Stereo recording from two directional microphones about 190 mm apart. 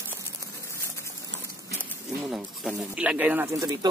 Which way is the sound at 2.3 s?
Centre (ahead or behind).